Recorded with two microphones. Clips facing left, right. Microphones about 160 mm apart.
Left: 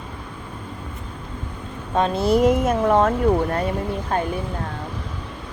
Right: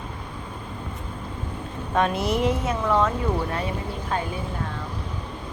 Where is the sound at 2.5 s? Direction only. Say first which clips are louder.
Left 6 dB; 50° left (ahead or behind).